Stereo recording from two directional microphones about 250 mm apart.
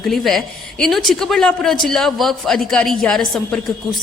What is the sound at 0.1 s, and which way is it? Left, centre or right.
Speech, centre.